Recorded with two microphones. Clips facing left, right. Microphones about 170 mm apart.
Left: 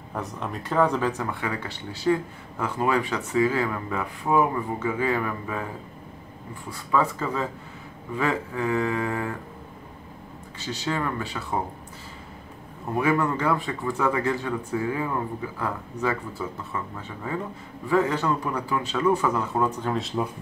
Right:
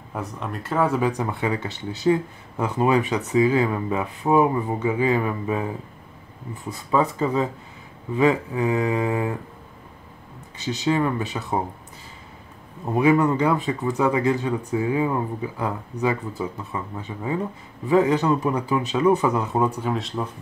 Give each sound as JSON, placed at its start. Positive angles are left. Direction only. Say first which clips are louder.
{"t": 0.1, "sound": "speech", "louder": "right 1 dB", "side_deg": 0}
{"t": 10.6, "sound": "speech", "louder": "right 6 dB", "side_deg": -20}
{"t": 12.9, "sound": "speech", "louder": "right 5 dB", "side_deg": -20}